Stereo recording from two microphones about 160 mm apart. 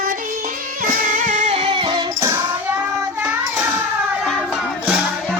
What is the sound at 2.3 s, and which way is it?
Child singing, 10° right (ahead or behind).